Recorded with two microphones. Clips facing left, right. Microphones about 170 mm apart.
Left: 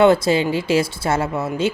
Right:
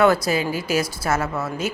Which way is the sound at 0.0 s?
25° left (ahead or behind).